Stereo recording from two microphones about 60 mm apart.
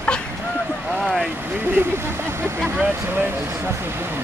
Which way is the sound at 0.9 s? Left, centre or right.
Centre.